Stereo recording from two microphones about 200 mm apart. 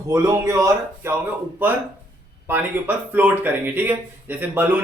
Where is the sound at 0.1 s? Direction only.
15° right (ahead or behind).